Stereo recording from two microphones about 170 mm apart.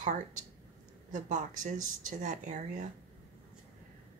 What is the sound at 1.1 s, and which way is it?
Speech, 50° right (ahead or behind).